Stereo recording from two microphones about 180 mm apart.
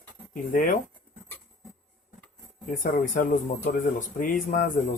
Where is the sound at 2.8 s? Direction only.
45° left (ahead or behind).